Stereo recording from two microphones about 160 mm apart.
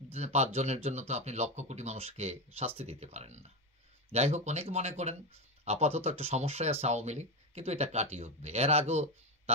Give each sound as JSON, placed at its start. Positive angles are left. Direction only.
{"t": 0.1, "sound": "speech", "side_deg": -45}